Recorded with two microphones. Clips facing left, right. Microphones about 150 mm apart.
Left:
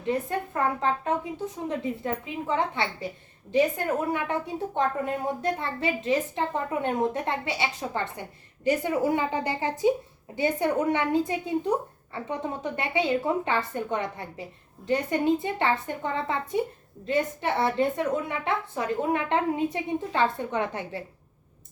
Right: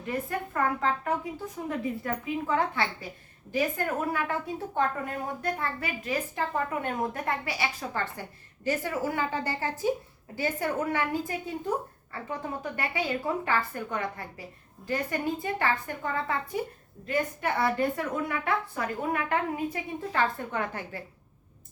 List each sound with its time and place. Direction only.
0.0 s a woman's voice: 25° left (ahead or behind)